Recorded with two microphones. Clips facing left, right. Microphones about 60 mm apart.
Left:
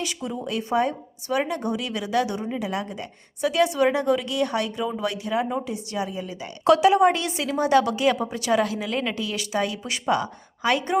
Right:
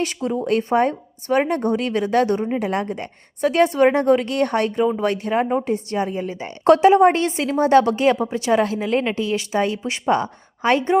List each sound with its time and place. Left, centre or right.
0.0 s speech: right